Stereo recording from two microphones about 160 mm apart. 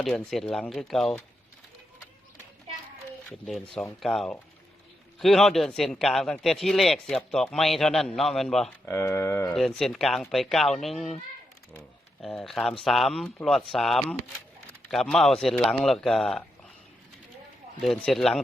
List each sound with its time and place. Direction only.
0.0 s a man's voice: centre (ahead or behind)
3.2 s a man's voice: 5° left (ahead or behind)
8.9 s speech: 20° left (ahead or behind)
9.5 s a man's voice: centre (ahead or behind)
12.2 s a man's voice: centre (ahead or behind)
17.7 s a man's voice: 5° left (ahead or behind)